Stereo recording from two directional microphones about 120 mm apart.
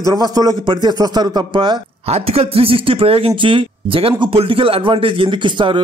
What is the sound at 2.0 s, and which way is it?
A man's voice, 55° right (ahead or behind).